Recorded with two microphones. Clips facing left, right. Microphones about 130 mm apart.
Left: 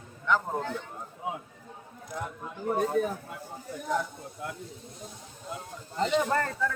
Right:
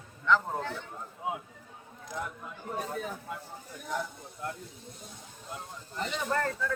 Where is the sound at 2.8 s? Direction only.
45° left (ahead or behind).